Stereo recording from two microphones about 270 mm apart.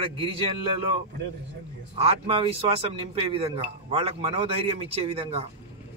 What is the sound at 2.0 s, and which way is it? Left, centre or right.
Speech, right.